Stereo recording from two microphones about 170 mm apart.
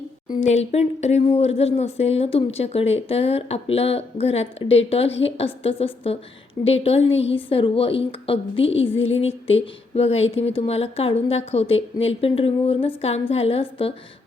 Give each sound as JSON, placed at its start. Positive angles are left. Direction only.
{"t": 0.3, "sound": "speech", "side_deg": 45}